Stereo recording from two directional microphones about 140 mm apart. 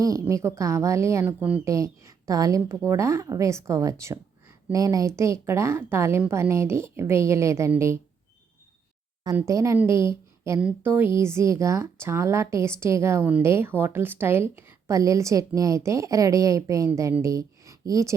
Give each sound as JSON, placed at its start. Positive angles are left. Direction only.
{"t": 0.0, "sound": "speech", "side_deg": -25}
{"t": 1.6, "sound": "speech", "side_deg": -20}
{"t": 9.3, "sound": "a woman's voice", "side_deg": -20}